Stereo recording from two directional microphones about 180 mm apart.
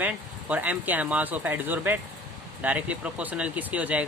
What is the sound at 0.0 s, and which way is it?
Speech, 10° right (ahead or behind).